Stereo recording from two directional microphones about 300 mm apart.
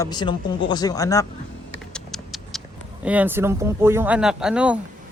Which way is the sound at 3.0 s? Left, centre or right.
Centre.